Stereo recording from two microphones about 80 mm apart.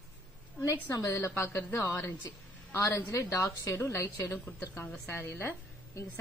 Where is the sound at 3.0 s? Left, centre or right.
Left.